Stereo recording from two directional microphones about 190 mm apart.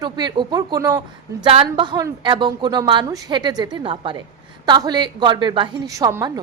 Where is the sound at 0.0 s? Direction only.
20° right (ahead or behind).